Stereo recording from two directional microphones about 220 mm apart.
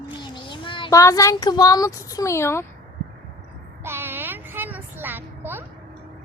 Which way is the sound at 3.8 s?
10° right (ahead or behind).